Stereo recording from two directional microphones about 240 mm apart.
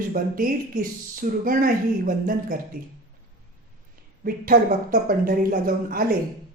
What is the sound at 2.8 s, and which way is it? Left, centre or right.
Speech, right.